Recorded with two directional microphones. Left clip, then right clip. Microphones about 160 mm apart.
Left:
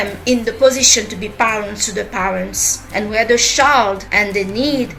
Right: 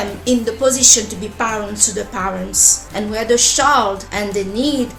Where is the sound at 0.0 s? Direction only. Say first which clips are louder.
Left 1 dB; 30° right (ahead or behind).